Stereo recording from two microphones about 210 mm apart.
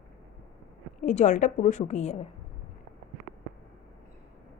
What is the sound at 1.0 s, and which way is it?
A woman's voice, 35° left (ahead or behind).